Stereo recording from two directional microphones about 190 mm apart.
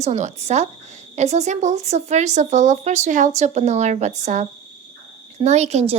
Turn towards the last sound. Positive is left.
turn(degrees=-35)  # may be behind; listen again after turning